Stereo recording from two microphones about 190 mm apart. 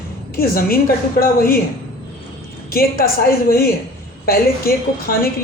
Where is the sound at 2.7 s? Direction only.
50° left (ahead or behind).